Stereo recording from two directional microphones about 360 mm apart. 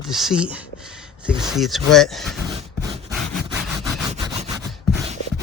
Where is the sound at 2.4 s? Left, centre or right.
Centre.